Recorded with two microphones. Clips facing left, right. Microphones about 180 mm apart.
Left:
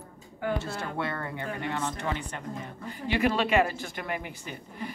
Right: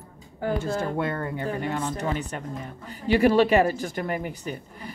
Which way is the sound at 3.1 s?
40° right (ahead or behind).